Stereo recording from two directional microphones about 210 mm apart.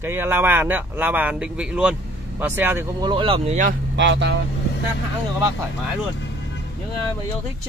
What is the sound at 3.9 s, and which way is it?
Speech, 55° right (ahead or behind).